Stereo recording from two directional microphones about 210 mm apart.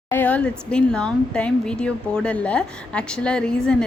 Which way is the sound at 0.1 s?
5° left (ahead or behind).